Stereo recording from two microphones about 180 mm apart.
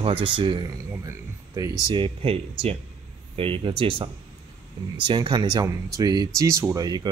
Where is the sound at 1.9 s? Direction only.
30° right (ahead or behind).